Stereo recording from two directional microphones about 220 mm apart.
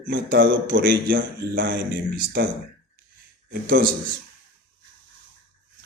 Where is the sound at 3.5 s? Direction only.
40° right (ahead or behind).